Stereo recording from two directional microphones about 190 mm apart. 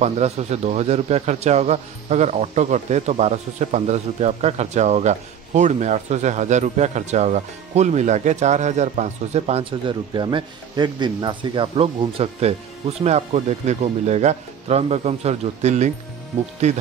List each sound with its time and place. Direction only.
0.0 s speech: 35° right (ahead or behind)